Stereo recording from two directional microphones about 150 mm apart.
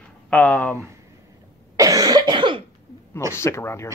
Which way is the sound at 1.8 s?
25° right (ahead or behind).